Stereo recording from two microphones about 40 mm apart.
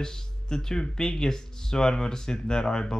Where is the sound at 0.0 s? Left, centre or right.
Centre.